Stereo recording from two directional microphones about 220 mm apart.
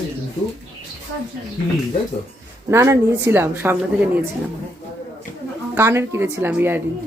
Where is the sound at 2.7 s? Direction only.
10° right (ahead or behind).